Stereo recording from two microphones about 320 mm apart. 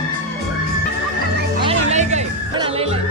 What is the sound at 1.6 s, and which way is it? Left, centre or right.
Music, centre.